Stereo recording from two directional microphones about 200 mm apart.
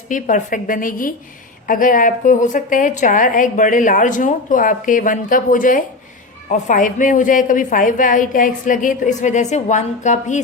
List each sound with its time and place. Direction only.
0.1 s a woman's voice: 40° left (ahead or behind)